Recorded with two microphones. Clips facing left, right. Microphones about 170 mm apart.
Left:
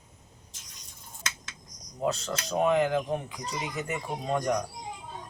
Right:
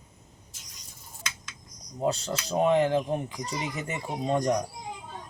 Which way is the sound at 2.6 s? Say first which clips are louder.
Right 2 dB; 30° right (ahead or behind).